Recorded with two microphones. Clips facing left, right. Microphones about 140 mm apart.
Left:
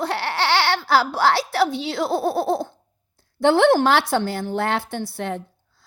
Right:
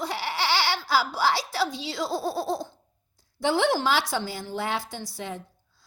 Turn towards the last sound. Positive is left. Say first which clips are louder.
# left 8 dB
turn(degrees=60)  # may be behind; listen again after turning